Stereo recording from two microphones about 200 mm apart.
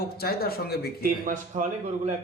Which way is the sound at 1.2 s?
40° right (ahead or behind).